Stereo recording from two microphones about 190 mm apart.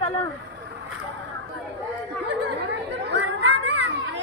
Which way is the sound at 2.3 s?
65° right (ahead or behind).